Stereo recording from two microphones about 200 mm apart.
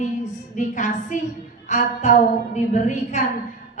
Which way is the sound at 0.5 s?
40° left (ahead or behind).